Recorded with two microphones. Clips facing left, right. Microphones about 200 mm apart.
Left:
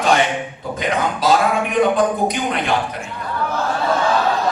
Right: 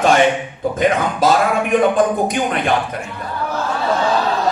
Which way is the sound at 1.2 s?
50° right (ahead or behind).